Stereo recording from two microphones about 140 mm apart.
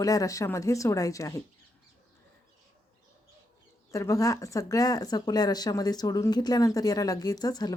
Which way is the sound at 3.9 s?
20° left (ahead or behind).